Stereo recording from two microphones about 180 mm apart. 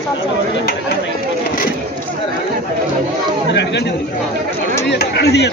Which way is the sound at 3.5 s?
70° left (ahead or behind).